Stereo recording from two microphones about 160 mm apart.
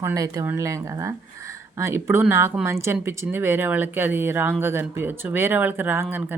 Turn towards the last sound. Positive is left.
turn(degrees=-10)  # may be behind; listen again after turning